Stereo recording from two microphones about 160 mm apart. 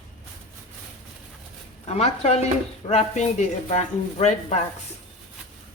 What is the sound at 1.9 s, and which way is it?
Speech, 40° left (ahead or behind).